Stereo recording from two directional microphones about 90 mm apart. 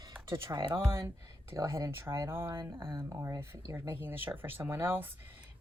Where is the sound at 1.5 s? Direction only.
40° right (ahead or behind).